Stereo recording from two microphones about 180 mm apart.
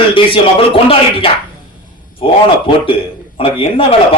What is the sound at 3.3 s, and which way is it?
Speech, 30° left (ahead or behind).